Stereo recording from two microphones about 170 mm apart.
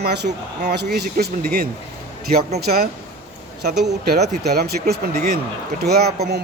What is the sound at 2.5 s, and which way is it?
A man's voice, 65° right (ahead or behind).